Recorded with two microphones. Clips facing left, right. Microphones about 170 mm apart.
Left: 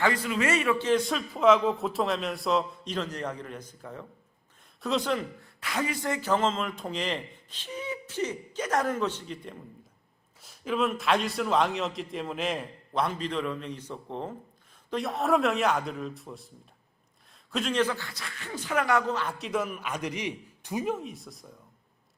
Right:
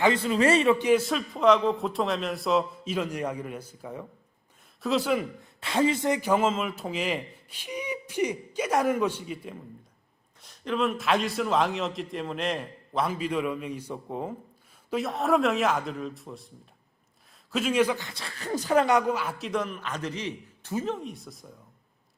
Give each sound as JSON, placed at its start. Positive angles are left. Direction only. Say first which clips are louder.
{"t": 0.0, "sound": "a man's voice", "louder": "right 4 dB", "side_deg": -25}
{"t": 0.8, "sound": "speech", "louder": "right 3 dB", "side_deg": -10}
{"t": 1.0, "sound": "a man's voice", "louder": "even", "side_deg": 0}
{"t": 5.4, "sound": "speech", "louder": "right 7 dB", "side_deg": -25}
{"t": 10.4, "sound": "a man's voice", "louder": "right 1 dB", "side_deg": 5}
{"t": 17.5, "sound": "speech", "louder": "right 3 dB", "side_deg": -5}
{"t": 18.1, "sound": "speech", "louder": "right 7 dB", "side_deg": -30}
{"t": 18.9, "sound": "a man's voice", "louder": "right 2 dB", "side_deg": -15}